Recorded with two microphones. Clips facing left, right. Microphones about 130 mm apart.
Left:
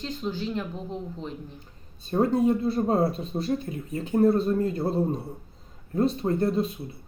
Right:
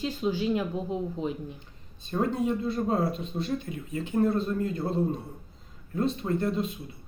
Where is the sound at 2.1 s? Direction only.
35° left (ahead or behind).